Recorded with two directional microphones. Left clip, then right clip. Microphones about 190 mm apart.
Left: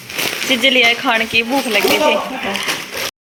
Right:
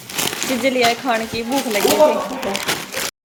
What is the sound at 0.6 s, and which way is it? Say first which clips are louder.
Speech: left 4 dB; 5° left (ahead or behind).